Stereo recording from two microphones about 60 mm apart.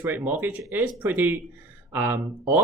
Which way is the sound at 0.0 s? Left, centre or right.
Right.